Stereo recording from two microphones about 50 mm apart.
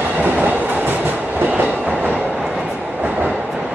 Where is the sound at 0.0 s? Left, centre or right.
Right.